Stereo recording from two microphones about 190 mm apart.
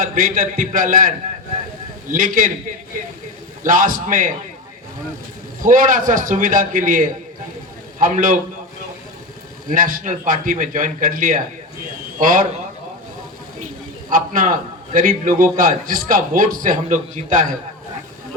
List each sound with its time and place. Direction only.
0.0 s a man's voice: 45° right (ahead or behind)
3.6 s a man's voice: 45° right (ahead or behind)
5.6 s a man's voice: 45° right (ahead or behind)
9.6 s a man's voice: 45° right (ahead or behind)
14.1 s a man's voice: 45° right (ahead or behind)